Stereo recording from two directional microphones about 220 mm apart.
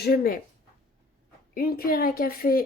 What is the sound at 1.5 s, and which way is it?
Speech, 40° left (ahead or behind).